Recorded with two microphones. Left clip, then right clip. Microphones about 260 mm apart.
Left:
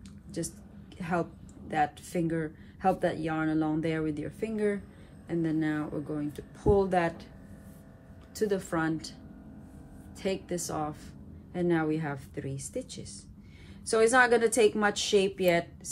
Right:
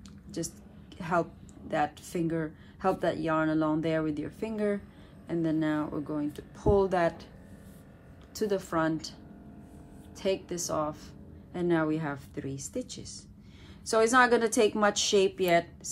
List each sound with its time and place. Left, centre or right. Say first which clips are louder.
0.9 s a woman's voice: right 3 dB; centre
8.4 s speech: right 1 dB; centre
10.1 s speech: right 2 dB; centre